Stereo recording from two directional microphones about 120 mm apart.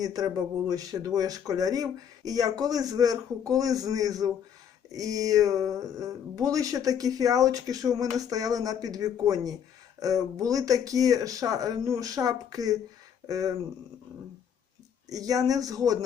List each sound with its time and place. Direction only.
0.0 s speech: 30° right (ahead or behind)
15.1 s speech: 30° right (ahead or behind)